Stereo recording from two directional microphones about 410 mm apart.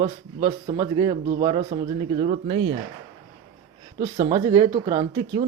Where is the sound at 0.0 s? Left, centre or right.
Centre.